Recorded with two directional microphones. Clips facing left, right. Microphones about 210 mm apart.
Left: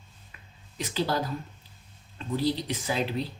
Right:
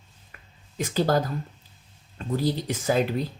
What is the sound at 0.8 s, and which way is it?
Speech, 45° right (ahead or behind).